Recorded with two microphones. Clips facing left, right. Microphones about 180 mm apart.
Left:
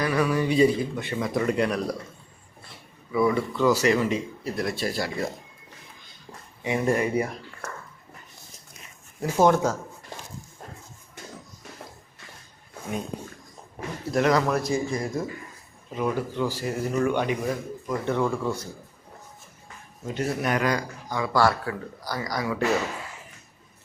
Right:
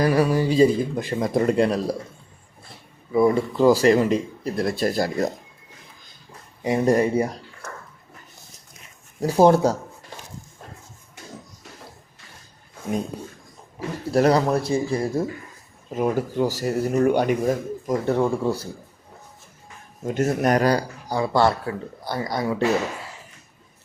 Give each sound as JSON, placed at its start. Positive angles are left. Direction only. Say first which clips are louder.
{"t": 0.0, "sound": "speech", "louder": "right 4 dB", "side_deg": -35}
{"t": 3.2, "sound": "speech", "louder": "right 5 dB", "side_deg": -35}
{"t": 6.6, "sound": "speech", "louder": "right 5 dB", "side_deg": -35}
{"t": 9.2, "sound": "speech", "louder": "right 4 dB", "side_deg": -35}
{"t": 14.1, "sound": "speech", "louder": "right 4 dB", "side_deg": -35}
{"t": 15.9, "sound": "speech", "louder": "right 4 dB", "side_deg": -45}
{"t": 20.1, "sound": "speech", "louder": "right 6 dB", "side_deg": -45}